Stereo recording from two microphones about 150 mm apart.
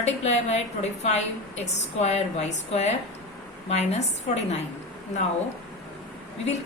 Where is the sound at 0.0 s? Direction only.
45° left (ahead or behind).